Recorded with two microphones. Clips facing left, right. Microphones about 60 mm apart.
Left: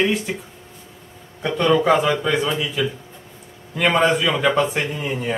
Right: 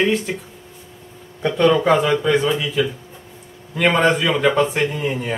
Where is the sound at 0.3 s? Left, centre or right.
Centre.